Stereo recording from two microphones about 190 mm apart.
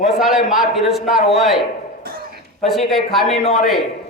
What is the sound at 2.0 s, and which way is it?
Cough, 55° right (ahead or behind).